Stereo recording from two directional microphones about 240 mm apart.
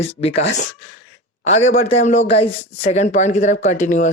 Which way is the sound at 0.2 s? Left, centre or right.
Left.